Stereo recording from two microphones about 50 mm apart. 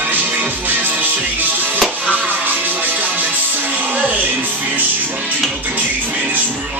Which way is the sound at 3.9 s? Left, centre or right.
Right.